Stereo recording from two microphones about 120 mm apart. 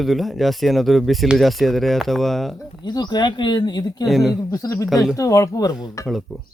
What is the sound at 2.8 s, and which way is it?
Speech, 35° left (ahead or behind).